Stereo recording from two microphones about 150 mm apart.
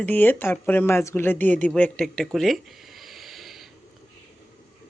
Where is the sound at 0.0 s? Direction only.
10° left (ahead or behind).